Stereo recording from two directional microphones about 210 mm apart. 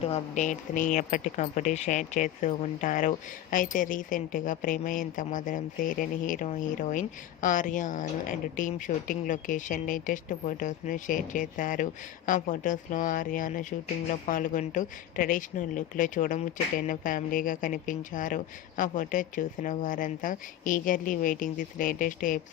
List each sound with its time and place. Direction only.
0.0 s a woman's voice: 30° left (ahead or behind)